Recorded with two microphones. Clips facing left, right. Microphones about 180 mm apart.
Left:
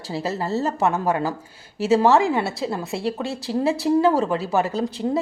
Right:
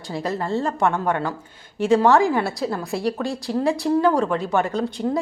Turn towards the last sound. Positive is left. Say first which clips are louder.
# even
turn(degrees=5)  # may be behind; listen again after turning